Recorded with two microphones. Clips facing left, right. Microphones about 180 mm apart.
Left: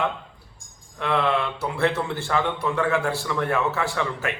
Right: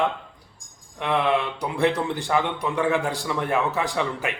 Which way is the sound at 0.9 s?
15° right (ahead or behind).